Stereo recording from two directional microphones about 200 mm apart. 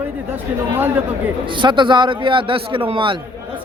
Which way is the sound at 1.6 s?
25° right (ahead or behind).